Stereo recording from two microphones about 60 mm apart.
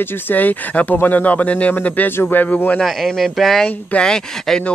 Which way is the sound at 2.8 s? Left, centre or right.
Centre.